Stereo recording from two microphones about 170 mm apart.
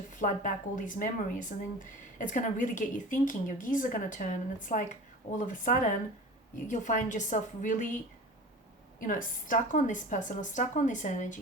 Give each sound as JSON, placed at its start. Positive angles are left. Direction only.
{"t": 0.2, "sound": "speech", "side_deg": 50}